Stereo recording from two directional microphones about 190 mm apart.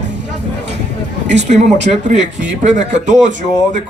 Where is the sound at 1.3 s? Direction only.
35° right (ahead or behind).